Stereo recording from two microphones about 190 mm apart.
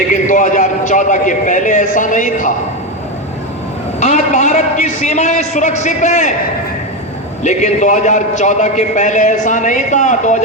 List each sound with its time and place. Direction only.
0.3 s a man's voice: 40° left (ahead or behind)
4.0 s a man's voice: 40° left (ahead or behind)
7.4 s a man's voice: 40° left (ahead or behind)